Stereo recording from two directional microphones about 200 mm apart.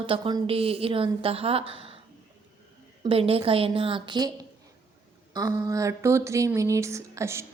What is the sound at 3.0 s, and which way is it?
A woman's voice, 30° right (ahead or behind).